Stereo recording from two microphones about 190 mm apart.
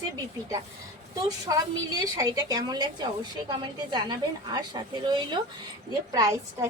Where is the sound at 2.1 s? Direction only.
20° right (ahead or behind).